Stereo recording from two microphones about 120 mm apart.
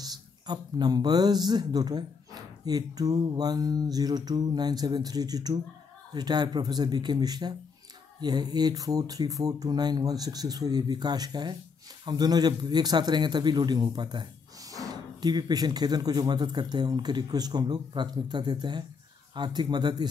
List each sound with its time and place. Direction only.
0.0 s speech: 35° right (ahead or behind)